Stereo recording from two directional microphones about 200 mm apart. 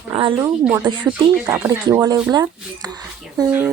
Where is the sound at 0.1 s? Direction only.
25° right (ahead or behind).